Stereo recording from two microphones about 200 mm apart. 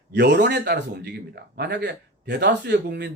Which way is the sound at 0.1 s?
60° right (ahead or behind).